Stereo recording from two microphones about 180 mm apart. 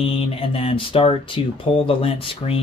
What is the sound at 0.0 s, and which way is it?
Speech, 30° left (ahead or behind).